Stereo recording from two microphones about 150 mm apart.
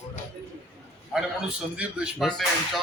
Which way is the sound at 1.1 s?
5° right (ahead or behind).